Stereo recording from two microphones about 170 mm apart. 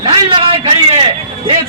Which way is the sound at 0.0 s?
30° right (ahead or behind).